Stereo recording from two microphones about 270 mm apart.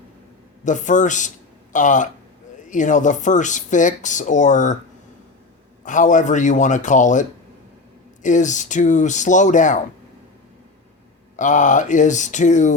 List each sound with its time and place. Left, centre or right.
0.6 s speech: left
5.8 s speech: left
11.3 s speech: left